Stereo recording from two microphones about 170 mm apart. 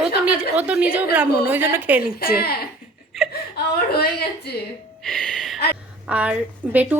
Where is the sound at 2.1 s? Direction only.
65° left (ahead or behind).